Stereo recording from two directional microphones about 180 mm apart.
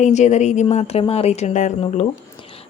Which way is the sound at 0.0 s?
40° left (ahead or behind).